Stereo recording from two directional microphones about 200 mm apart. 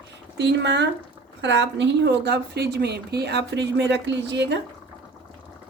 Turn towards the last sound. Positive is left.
turn(degrees=-60)  # may be behind; listen again after turning